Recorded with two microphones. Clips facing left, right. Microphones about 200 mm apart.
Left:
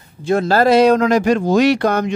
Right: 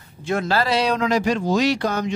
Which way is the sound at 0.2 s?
35° left (ahead or behind).